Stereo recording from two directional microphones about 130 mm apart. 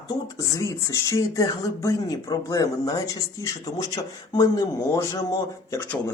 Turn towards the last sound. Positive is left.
turn(degrees=20)  # may be behind; listen again after turning